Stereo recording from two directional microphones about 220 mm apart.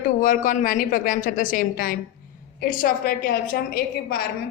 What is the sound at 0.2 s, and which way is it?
A woman's voice, 35° left (ahead or behind).